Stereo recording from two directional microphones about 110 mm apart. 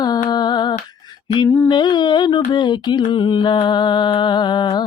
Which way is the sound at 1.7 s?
45° left (ahead or behind).